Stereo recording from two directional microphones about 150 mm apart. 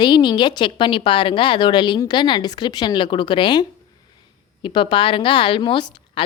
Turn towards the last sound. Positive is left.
turn(degrees=30)  # may be behind; listen again after turning